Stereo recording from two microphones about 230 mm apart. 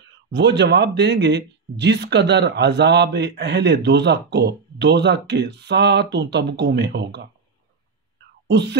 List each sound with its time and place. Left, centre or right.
0.3 s speech: right
8.5 s speech: right